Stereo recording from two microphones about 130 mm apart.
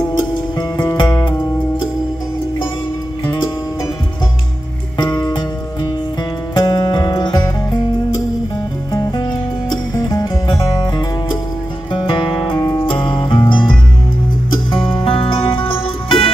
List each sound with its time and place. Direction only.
0.3 s music: 35° left (ahead or behind)
4.9 s music: 35° left (ahead or behind)
6.5 s music: 30° left (ahead or behind)
8.9 s music: 30° left (ahead or behind)
12.5 s music: 20° left (ahead or behind)
12.8 s music: 40° left (ahead or behind)
15.0 s music: 40° left (ahead or behind)